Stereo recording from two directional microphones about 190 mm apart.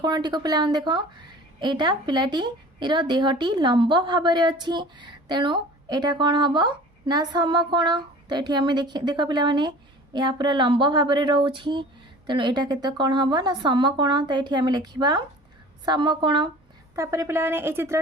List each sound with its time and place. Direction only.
0.0 s a woman's voice: 25° right (ahead or behind)